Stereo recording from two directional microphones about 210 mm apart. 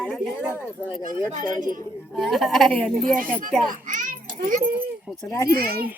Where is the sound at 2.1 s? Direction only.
Centre (ahead or behind).